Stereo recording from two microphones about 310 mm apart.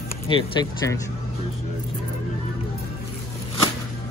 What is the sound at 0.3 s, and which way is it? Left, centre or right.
Speech, centre.